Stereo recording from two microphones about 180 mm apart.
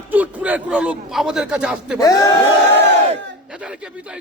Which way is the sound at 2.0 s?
20° left (ahead or behind).